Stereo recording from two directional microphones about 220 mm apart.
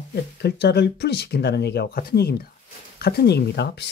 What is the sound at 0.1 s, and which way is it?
Speech, 50° left (ahead or behind).